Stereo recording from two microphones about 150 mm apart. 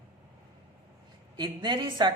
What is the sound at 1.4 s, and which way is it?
Speech, 30° right (ahead or behind).